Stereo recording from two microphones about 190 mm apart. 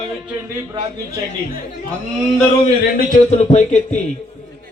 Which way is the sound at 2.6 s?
50° left (ahead or behind).